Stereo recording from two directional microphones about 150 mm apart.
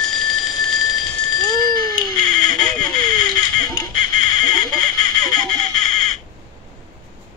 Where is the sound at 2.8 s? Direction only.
25° left (ahead or behind).